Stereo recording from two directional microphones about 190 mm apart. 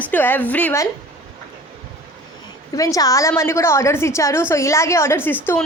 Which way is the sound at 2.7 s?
20° left (ahead or behind).